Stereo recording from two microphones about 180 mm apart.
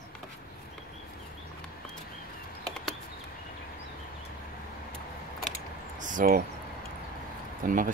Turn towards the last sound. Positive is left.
turn(degrees=-50)  # may be behind; listen again after turning